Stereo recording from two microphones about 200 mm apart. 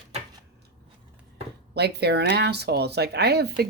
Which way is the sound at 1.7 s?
55° right (ahead or behind).